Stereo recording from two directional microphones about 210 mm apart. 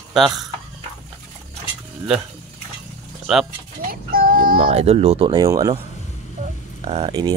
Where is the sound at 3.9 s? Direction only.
45° right (ahead or behind).